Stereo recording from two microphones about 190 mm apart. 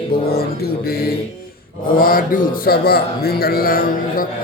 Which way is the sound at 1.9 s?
50° left (ahead or behind).